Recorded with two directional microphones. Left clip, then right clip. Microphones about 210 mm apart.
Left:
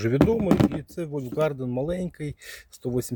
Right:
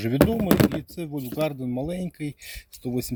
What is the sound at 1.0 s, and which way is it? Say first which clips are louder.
Speech: left 3 dB; 45° left (ahead or behind).